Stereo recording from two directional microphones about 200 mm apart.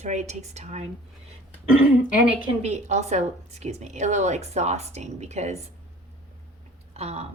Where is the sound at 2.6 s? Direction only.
35° right (ahead or behind).